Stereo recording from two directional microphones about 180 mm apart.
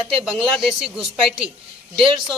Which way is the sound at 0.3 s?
5° right (ahead or behind).